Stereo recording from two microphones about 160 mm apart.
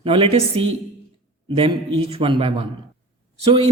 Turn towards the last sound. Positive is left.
turn(degrees=-35)  # may be behind; listen again after turning